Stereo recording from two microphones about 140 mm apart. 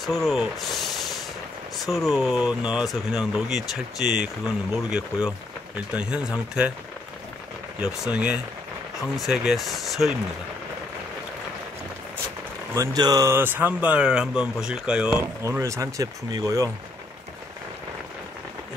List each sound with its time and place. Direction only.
0.0 s speech: centre (ahead or behind)
1.9 s speech: centre (ahead or behind)
7.8 s speech: 5° right (ahead or behind)
12.7 s speech: 25° right (ahead or behind); by 15.2 s 5° right (ahead or behind)
15.4 s speech: 20° right (ahead or behind)